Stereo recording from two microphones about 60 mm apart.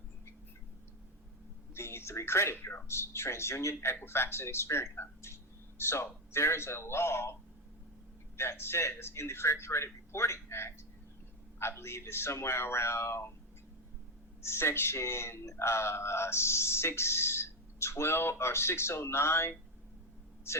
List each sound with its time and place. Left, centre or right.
1.7 s speech: left
8.4 s speech: left
14.4 s speech: left